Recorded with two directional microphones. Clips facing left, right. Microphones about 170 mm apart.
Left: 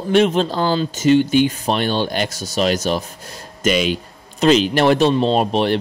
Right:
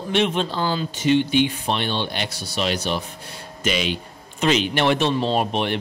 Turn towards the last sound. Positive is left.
turn(degrees=35)  # may be behind; listen again after turning